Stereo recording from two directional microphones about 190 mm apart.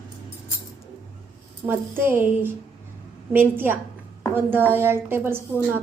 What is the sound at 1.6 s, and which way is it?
A woman's voice, 10° right (ahead or behind).